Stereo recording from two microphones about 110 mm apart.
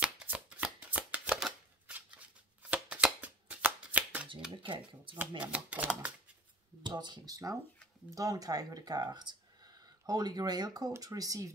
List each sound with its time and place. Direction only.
0.0 s shuffling cards: 10° right (ahead or behind)
4.5 s speech: 50° right (ahead or behind)
5.4 s speech: 15° right (ahead or behind)
6.8 s speech: 40° right (ahead or behind)